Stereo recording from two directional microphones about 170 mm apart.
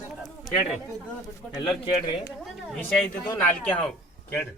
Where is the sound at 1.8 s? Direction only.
30° left (ahead or behind).